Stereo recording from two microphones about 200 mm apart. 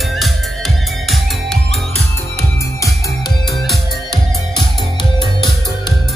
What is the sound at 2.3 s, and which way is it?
Music, 15° left (ahead or behind).